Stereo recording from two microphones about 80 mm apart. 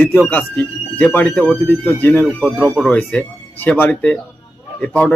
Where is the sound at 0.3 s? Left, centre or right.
Left.